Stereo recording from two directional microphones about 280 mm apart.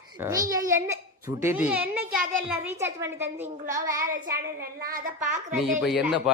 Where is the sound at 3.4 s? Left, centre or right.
Right.